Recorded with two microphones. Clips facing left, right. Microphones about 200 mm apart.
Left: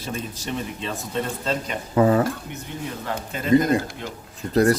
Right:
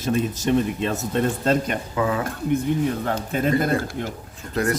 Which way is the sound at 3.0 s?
55° right (ahead or behind).